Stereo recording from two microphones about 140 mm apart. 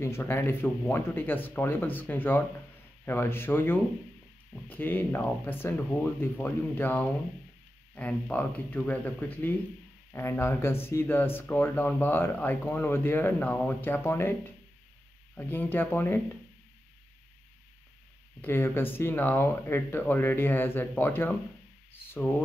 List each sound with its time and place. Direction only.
0.0 s speech: 15° left (ahead or behind)
15.3 s speech: 15° left (ahead or behind)
18.4 s speech: 15° left (ahead or behind)